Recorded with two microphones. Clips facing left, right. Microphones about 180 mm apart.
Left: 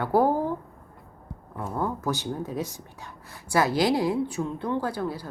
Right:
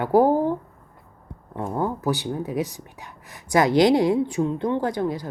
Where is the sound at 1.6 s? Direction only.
20° right (ahead or behind).